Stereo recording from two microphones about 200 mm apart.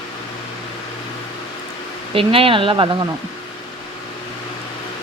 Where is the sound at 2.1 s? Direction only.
25° right (ahead or behind).